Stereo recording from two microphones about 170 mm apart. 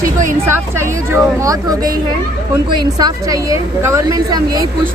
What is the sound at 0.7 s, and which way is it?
Speech, 15° right (ahead or behind).